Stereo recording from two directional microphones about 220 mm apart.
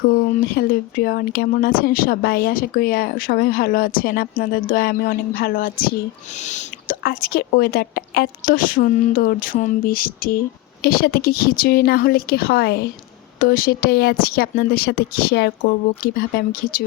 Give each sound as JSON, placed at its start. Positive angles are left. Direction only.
{"t": 0.3, "sound": "speech", "side_deg": 40}